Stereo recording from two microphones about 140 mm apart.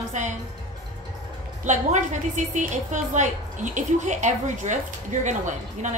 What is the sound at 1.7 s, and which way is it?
A woman's voice, 60° right (ahead or behind).